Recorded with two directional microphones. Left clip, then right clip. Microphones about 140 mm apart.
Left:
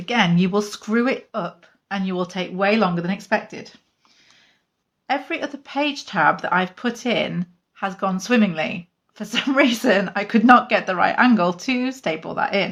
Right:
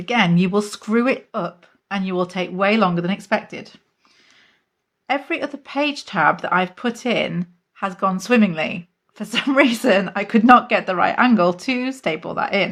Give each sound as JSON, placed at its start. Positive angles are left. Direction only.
{"t": 0.0, "sound": "speech", "side_deg": -30}
{"t": 5.0, "sound": "speech", "side_deg": -35}